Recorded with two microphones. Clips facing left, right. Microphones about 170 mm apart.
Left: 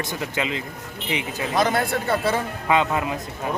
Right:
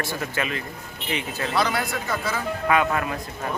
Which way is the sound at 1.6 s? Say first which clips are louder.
Left 4 dB; 50° left (ahead or behind).